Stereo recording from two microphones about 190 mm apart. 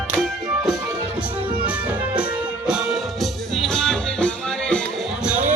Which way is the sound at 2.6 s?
5° right (ahead or behind).